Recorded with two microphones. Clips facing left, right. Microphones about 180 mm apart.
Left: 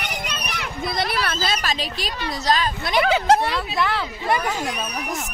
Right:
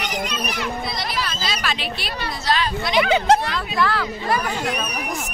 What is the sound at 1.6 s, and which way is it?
Speech, 40° left (ahead or behind).